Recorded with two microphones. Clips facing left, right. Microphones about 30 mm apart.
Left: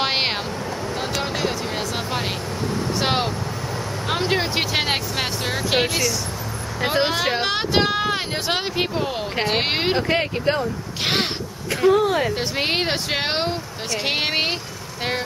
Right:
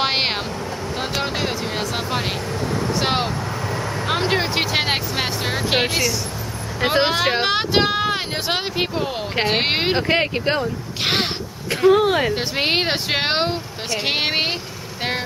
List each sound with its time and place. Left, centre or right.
0.0 s vehicle: centre
0.9 s speech: centre
9.3 s speech: centre
10.6 s speech: centre
11.9 s speech: right